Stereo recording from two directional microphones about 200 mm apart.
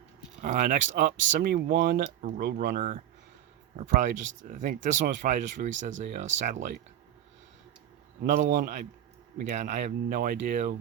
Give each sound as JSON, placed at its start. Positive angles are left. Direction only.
{"t": 0.4, "sound": "speech", "side_deg": -40}
{"t": 8.3, "sound": "speech", "side_deg": -45}